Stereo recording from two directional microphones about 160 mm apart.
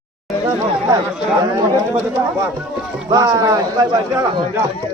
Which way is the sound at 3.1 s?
20° right (ahead or behind).